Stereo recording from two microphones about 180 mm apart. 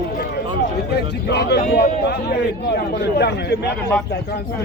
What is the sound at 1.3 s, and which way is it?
A man's voice, 65° left (ahead or behind).